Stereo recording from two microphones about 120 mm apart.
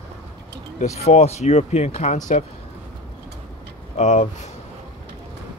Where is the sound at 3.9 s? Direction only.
90° left.